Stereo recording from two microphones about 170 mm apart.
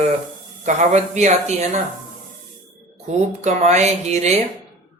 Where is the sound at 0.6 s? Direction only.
45° right (ahead or behind).